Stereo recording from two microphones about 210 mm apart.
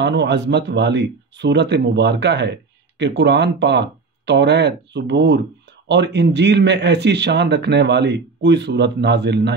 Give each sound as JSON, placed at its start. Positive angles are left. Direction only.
{"t": 0.0, "sound": "speech", "side_deg": -55}